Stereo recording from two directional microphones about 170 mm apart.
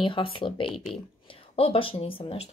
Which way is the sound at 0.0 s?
30° left (ahead or behind).